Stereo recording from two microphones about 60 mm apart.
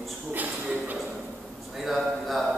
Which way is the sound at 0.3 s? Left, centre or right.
Right.